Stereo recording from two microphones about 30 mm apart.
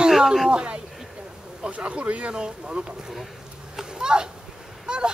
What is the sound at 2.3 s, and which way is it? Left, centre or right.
Speech, right.